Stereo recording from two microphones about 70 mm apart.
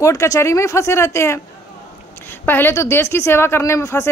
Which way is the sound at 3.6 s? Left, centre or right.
Left.